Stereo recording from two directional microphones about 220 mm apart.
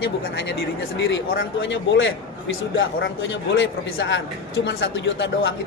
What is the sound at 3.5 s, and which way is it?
A man's voice, 55° left (ahead or behind).